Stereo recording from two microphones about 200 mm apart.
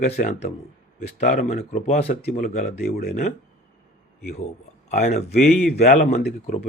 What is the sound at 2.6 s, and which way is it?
Speech, 50° left (ahead or behind).